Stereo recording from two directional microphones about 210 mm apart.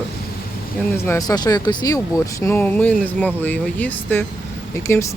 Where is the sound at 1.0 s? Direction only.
15° left (ahead or behind).